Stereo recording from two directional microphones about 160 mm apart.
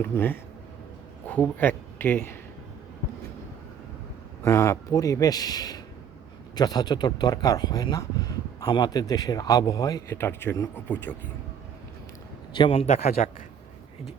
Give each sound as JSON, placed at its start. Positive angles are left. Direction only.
{"t": 0.0, "sound": "speech", "side_deg": 15}
{"t": 4.4, "sound": "speech", "side_deg": 15}
{"t": 12.5, "sound": "a man's voice", "side_deg": 35}